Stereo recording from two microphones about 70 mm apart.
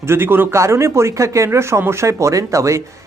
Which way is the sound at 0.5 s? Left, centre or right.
Right.